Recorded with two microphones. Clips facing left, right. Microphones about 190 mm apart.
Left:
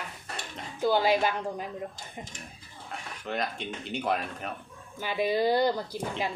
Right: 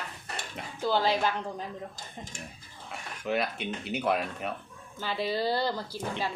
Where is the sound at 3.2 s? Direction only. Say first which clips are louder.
Right 3 dB; 5° right (ahead or behind).